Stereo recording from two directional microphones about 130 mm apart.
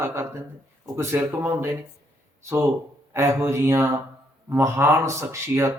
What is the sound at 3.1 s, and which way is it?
Speech, 25° right (ahead or behind).